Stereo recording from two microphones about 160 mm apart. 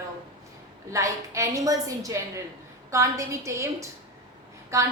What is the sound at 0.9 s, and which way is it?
A woman's voice, 20° right (ahead or behind).